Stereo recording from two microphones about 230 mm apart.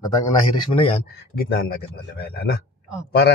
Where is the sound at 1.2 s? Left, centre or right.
Left.